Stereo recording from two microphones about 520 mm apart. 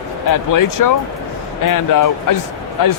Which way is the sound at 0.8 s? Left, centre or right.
Left.